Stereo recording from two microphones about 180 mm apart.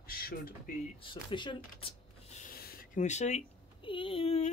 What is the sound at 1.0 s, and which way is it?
Speech, 25° left (ahead or behind).